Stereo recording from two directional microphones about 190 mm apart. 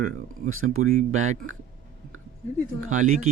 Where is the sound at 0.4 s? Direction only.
90° right.